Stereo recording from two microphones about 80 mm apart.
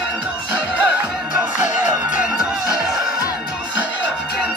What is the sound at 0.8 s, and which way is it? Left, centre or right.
Music, centre.